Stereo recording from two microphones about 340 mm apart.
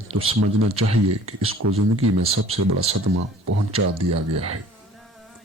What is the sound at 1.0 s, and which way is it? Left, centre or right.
Speech, right.